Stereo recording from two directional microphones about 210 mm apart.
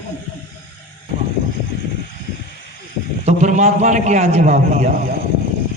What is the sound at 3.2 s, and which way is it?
A man's voice, 35° right (ahead or behind).